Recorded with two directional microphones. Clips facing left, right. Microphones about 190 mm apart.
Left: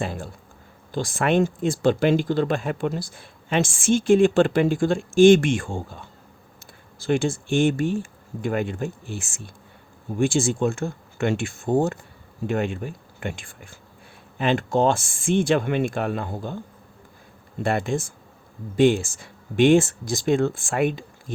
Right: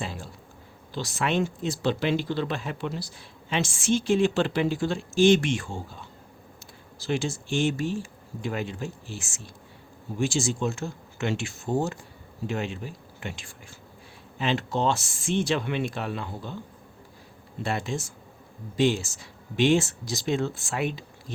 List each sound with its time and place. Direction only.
0.0 s speech: 55° left (ahead or behind)
17.6 s speech: 55° left (ahead or behind)